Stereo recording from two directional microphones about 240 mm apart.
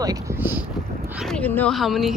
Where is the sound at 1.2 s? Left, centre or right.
Centre.